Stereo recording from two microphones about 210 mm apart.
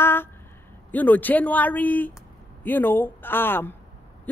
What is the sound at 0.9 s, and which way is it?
Speech, 10° left (ahead or behind).